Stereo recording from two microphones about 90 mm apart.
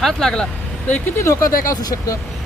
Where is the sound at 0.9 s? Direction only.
30° left (ahead or behind).